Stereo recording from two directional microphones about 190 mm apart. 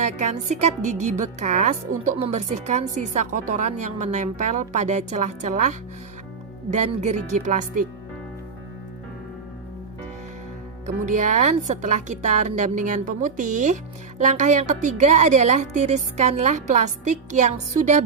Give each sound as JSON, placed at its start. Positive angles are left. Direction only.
{"t": 0.0, "sound": "a woman's voice", "side_deg": -35}
{"t": 11.0, "sound": "a woman's voice", "side_deg": -40}